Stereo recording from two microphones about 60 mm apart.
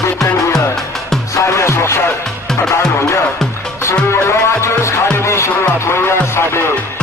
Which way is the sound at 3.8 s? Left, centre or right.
Left.